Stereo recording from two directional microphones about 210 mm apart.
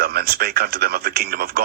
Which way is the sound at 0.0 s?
50° right (ahead or behind).